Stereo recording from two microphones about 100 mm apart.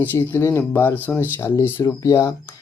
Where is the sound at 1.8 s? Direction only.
35° left (ahead or behind).